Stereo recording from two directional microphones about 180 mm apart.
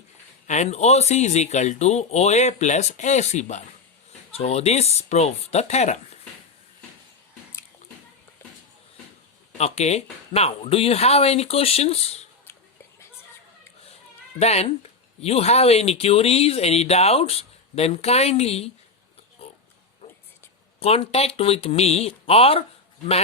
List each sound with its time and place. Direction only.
0.4 s speech: 40° left (ahead or behind)
9.6 s speech: 35° left (ahead or behind)
14.3 s speech: 35° left (ahead or behind)
20.7 s speech: 35° left (ahead or behind)